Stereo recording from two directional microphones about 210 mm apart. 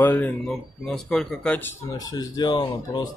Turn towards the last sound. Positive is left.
turn(degrees=20)  # may be behind; listen again after turning